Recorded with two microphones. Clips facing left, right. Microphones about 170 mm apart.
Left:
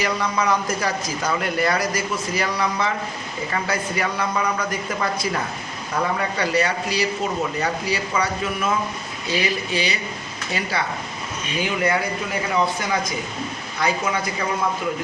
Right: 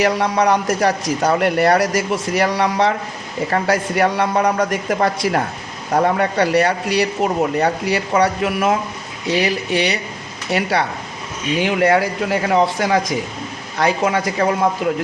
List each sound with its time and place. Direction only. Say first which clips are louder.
0.0 s speech: right 6 dB; 70° right (ahead or behind); by 4.7 s 45° right (ahead or behind)
5.0 s speech: right 5 dB; 75° right (ahead or behind)